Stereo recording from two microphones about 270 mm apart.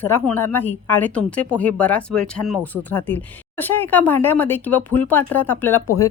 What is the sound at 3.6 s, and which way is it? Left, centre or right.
A woman's voice, centre.